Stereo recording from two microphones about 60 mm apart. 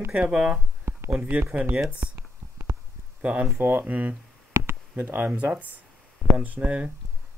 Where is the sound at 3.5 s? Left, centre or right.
Right.